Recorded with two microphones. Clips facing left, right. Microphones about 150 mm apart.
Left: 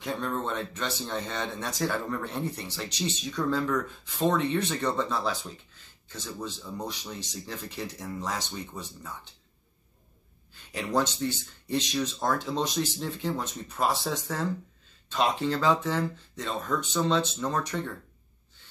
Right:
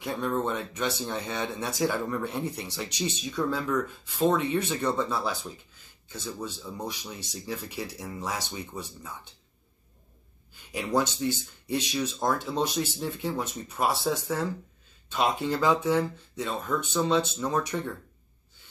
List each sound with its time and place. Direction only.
0.0 s speech: 5° right (ahead or behind)
10.5 s a sound: 5° right (ahead or behind)
11.6 s speech: 10° right (ahead or behind)